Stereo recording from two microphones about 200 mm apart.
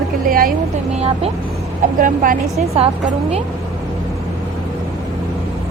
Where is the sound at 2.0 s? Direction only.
45° right (ahead or behind).